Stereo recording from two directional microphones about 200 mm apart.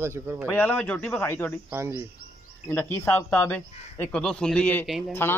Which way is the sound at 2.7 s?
10° left (ahead or behind).